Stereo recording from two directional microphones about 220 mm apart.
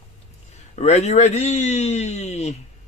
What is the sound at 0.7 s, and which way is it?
A man's voice, 30° left (ahead or behind).